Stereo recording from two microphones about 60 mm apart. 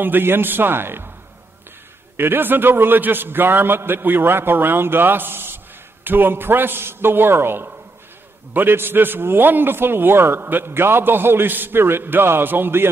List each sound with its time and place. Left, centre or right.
0.0 s a man's voice: right
2.1 s a man's voice: right